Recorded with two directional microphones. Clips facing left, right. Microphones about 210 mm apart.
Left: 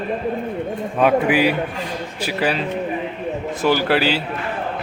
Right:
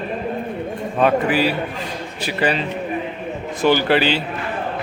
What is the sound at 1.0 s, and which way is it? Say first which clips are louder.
A man's voice: left 1 dB; 10° left (ahead or behind).